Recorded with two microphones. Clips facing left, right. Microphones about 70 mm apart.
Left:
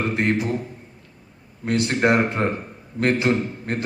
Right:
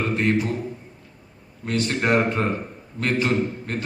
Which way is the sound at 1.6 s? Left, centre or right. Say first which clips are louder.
Left 3 dB; left.